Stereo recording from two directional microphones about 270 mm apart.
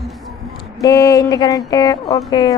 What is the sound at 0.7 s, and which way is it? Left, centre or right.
Speech, centre.